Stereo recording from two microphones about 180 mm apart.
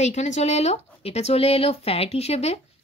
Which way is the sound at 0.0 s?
40° left (ahead or behind).